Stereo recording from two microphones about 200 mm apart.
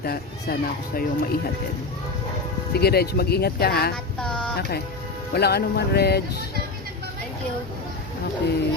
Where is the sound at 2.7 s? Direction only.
50° left (ahead or behind).